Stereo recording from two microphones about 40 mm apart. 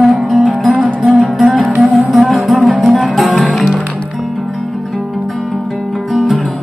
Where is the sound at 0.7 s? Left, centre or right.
Right.